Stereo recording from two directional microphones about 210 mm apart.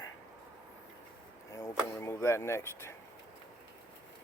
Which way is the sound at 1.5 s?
15° left (ahead or behind).